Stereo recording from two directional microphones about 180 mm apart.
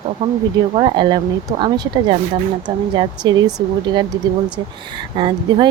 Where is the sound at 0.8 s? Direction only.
25° right (ahead or behind).